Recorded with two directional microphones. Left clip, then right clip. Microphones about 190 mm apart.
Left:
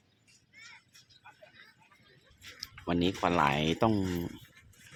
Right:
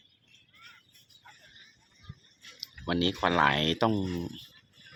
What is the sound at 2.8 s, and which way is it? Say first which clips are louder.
Speech: right 2 dB; 5° left (ahead or behind).